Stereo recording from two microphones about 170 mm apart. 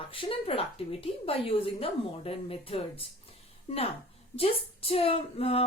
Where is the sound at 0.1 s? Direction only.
35° left (ahead or behind).